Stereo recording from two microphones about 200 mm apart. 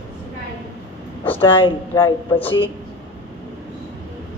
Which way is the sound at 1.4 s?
25° left (ahead or behind).